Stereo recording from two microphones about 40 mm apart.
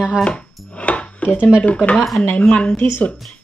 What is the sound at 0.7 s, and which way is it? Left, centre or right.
Dishes, left.